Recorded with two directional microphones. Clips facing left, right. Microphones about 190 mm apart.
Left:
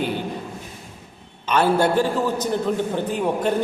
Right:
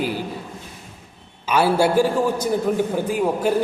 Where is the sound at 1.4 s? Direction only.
10° right (ahead or behind).